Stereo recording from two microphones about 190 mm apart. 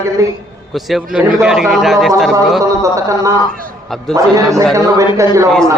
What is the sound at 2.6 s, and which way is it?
A man's voice, 15° right (ahead or behind).